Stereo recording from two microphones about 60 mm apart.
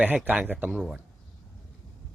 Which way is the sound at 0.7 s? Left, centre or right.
Centre.